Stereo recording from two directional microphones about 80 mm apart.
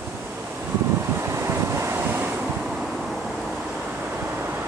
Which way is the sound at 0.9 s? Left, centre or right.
Right.